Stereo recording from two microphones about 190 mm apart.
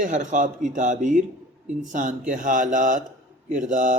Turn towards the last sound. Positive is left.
turn(degrees=-40)  # may be behind; listen again after turning